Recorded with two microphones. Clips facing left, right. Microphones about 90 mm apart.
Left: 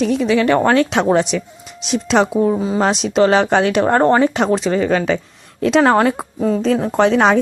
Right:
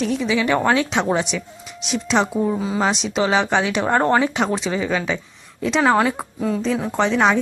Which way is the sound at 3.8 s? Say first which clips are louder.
Left 4 dB; 30° left (ahead or behind).